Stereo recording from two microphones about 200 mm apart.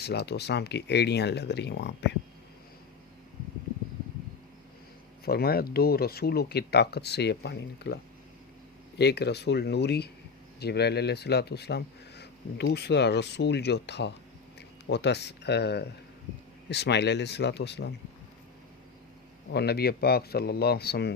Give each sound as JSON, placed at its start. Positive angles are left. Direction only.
{"t": 0.0, "sound": "speech", "side_deg": 55}
{"t": 5.2, "sound": "speech", "side_deg": 50}
{"t": 9.0, "sound": "speech", "side_deg": 55}
{"t": 19.5, "sound": "speech", "side_deg": 50}